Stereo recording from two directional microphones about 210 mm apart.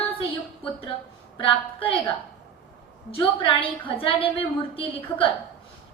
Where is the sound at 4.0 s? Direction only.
25° left (ahead or behind).